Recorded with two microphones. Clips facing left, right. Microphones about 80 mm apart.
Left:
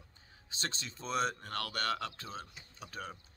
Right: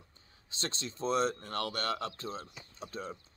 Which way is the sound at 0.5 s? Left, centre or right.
Right.